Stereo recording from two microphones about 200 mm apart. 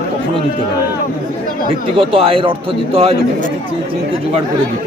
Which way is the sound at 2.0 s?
25° right (ahead or behind).